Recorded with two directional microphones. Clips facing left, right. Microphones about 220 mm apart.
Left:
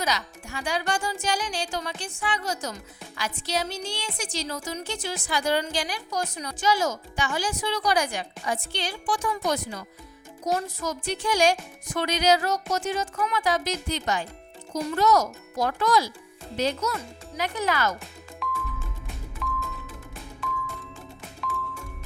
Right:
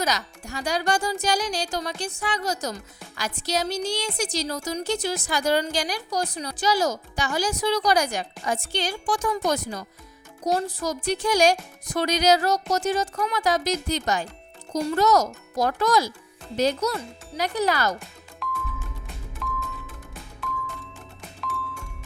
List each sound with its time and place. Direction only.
0.0 s a woman's voice: 40° right (ahead or behind)
18.4 s music: centre (ahead or behind)